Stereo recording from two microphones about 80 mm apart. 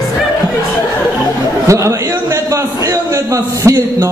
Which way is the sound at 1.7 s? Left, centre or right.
Right.